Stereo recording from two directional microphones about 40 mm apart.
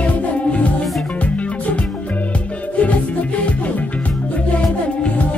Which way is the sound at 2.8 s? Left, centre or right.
Left.